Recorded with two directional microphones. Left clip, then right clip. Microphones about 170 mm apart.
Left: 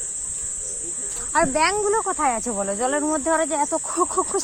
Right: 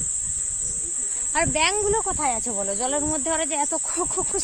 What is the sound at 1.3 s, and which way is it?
Speech, 25° right (ahead or behind).